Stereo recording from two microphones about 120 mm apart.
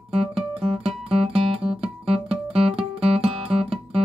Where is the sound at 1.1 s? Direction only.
55° right (ahead or behind).